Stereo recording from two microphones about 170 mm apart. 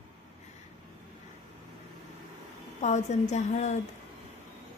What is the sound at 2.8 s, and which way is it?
Speech, 45° left (ahead or behind).